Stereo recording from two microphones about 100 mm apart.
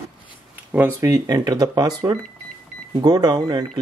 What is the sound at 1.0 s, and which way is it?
Speech, 35° right (ahead or behind).